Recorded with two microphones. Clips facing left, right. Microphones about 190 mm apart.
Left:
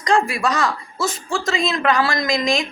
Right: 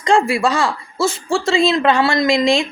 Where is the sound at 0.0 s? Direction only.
30° right (ahead or behind).